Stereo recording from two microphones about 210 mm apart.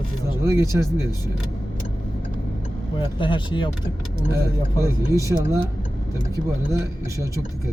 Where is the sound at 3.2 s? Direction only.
25° left (ahead or behind).